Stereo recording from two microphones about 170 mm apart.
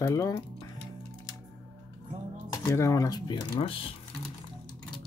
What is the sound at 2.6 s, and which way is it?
Speech, 15° left (ahead or behind).